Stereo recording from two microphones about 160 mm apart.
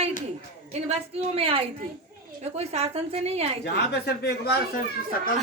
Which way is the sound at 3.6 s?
85° left.